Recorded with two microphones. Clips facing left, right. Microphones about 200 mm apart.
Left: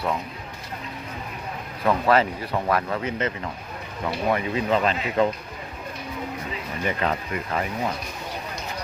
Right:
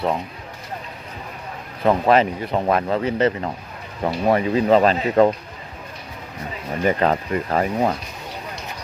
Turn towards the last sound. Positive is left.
turn(degrees=-40)  # may be behind; listen again after turning